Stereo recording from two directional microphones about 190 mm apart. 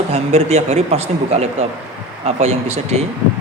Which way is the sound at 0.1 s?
35° right (ahead or behind).